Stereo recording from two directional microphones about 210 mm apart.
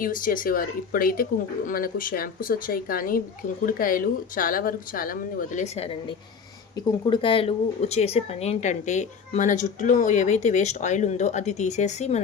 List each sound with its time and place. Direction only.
0.0 s speech: 40° left (ahead or behind)